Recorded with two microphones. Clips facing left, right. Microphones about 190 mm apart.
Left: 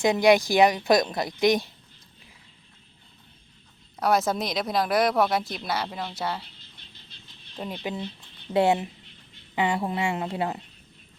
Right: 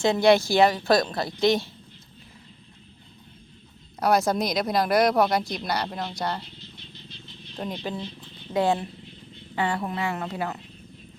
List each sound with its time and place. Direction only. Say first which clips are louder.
0.0 s speech: even; 15° left (ahead or behind)
4.0 s speech: right 2 dB; centre (ahead or behind)
7.6 s speech: right 1 dB; 10° left (ahead or behind)
8.5 s a woman's voice: left 2 dB; 25° left (ahead or behind)